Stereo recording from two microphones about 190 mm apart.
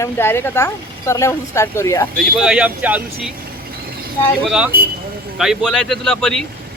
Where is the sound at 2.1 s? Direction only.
Centre (ahead or behind).